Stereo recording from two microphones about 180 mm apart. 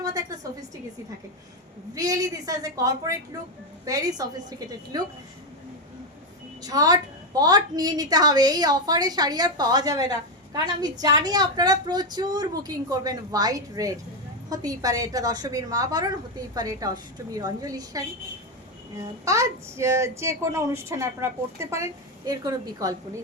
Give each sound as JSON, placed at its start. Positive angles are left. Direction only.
{"t": 0.0, "sound": "a sound", "side_deg": -20}
{"t": 2.0, "sound": "a woman's voice", "side_deg": -20}
{"t": 6.6, "sound": "a woman's voice", "side_deg": -20}
{"t": 19.2, "sound": "a woman's voice", "side_deg": -15}